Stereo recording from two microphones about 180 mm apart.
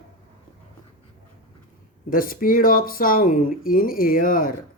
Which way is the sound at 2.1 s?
50° left (ahead or behind).